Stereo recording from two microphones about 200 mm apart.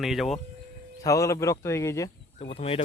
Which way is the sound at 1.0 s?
15° left (ahead or behind).